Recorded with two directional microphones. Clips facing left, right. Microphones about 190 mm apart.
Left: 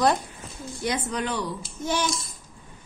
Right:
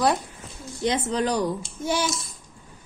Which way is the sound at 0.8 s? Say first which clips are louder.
Right 4 dB; 25° right (ahead or behind).